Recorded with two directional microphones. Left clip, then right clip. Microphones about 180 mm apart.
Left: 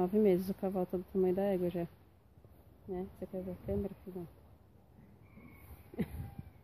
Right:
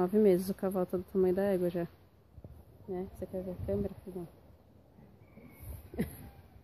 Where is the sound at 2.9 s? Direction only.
Centre (ahead or behind).